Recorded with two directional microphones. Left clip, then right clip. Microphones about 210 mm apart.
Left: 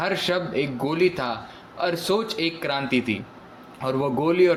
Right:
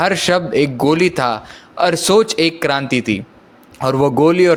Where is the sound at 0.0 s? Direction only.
45° right (ahead or behind).